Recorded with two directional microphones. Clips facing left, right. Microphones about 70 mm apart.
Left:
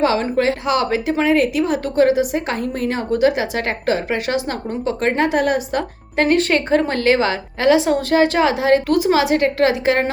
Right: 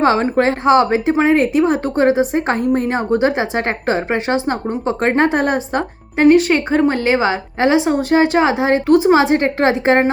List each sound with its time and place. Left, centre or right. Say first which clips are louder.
0.0 s a woman's voice: right 3 dB; right
6.1 s a woman's voice: right 5 dB; centre; by 10.0 s right